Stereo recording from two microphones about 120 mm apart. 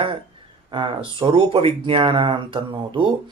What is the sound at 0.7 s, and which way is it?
Speech, 40° right (ahead or behind).